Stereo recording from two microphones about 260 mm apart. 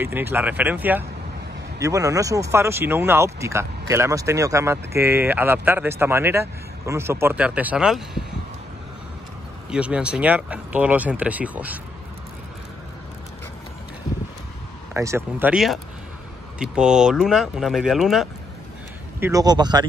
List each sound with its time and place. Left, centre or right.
0.0 s speech: centre
9.7 s speech: centre
15.0 s speech: centre